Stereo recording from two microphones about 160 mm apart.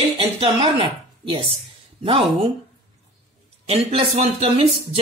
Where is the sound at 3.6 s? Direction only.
40° right (ahead or behind).